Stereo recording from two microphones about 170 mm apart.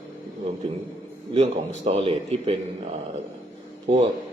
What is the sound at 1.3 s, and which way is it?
A man's voice, 40° right (ahead or behind).